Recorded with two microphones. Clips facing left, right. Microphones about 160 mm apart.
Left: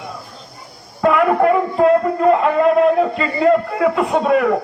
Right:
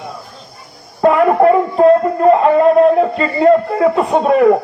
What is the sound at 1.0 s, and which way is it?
Music, 30° right (ahead or behind).